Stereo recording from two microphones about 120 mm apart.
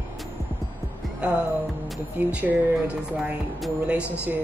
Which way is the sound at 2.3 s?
10° right (ahead or behind).